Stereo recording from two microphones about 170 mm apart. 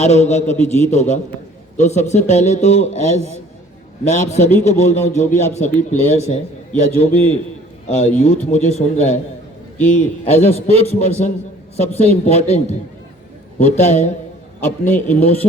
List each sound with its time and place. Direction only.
0.0 s a man's voice: 40° left (ahead or behind)
10.2 s a man's voice: 35° left (ahead or behind)
14.9 s a man's voice: 10° left (ahead or behind)